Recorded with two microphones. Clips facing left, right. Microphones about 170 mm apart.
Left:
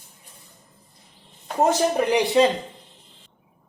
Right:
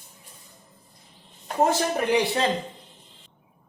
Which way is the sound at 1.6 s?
15° left (ahead or behind).